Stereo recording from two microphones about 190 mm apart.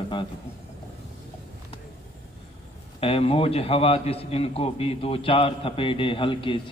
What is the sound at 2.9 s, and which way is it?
A man's voice, 30° left (ahead or behind).